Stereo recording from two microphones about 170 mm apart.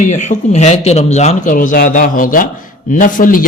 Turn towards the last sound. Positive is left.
turn(degrees=55)  # may be behind; listen again after turning